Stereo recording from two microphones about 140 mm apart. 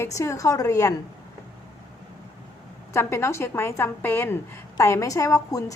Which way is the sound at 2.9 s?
20° left (ahead or behind).